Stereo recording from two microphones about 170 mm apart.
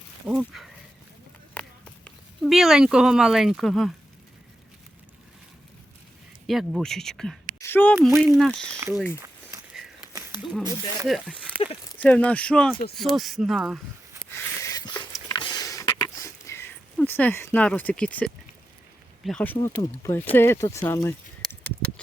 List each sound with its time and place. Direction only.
0.3 s speech: 5° right (ahead or behind)
1.6 s run: 10° left (ahead or behind)
2.0 s speech: centre (ahead or behind)
6.5 s speech: centre (ahead or behind)
7.6 s a sound: 10° left (ahead or behind)
7.9 s speech: 15° right (ahead or behind)
8.3 s speech: centre (ahead or behind)
9.7 s a sound: 5° right (ahead or behind)
10.1 s a sound: 20° right (ahead or behind)
10.6 s speech: 20° right (ahead or behind)
11.1 s speech: 5° right (ahead or behind)
11.9 s speech: 10° left (ahead or behind)
14.3 s a sound: 20° left (ahead or behind)
19.2 s speech: 5° left (ahead or behind)